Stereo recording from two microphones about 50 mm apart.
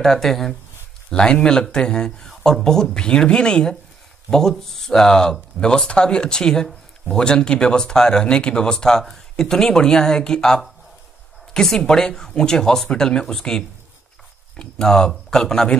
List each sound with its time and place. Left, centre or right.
0.0 s speech: centre
1.1 s speech: centre